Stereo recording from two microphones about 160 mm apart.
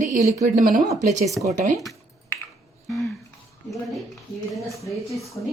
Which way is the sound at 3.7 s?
Centre (ahead or behind).